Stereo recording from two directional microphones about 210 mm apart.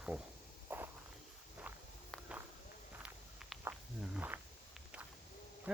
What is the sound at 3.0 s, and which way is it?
Walk, 5° right (ahead or behind).